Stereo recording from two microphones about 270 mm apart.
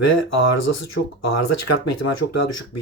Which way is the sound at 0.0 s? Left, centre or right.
Left.